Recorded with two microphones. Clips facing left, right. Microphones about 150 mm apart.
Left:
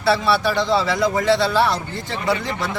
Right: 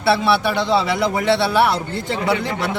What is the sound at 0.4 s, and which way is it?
Speech, 20° right (ahead or behind).